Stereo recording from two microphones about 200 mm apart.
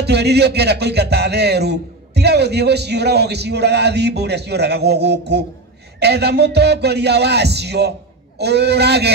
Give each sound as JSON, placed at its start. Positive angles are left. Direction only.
{"t": 0.0, "sound": "speech", "side_deg": -55}